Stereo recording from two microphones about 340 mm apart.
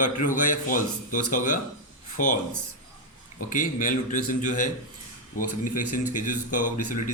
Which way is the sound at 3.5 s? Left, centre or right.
Left.